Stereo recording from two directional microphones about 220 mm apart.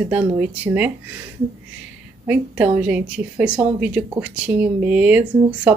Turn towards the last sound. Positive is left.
turn(degrees=-5)  # may be behind; listen again after turning